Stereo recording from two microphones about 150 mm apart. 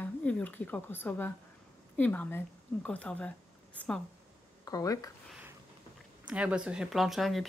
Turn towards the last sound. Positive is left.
turn(degrees=0)  # may be behind; listen again after turning